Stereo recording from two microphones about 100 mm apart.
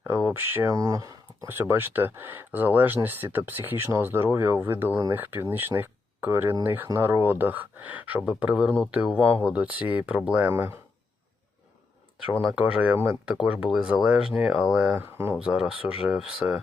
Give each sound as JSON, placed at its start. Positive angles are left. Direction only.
{"t": 0.0, "sound": "speech", "side_deg": -20}
{"t": 0.7, "sound": "speech", "side_deg": -35}
{"t": 1.5, "sound": "speech", "side_deg": -20}
{"t": 12.5, "sound": "speech", "side_deg": -10}